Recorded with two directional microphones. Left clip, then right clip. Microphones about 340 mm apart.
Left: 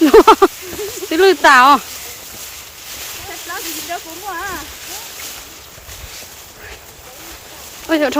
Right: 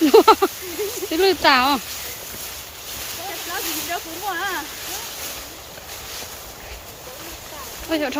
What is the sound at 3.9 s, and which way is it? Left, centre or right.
Speech, centre.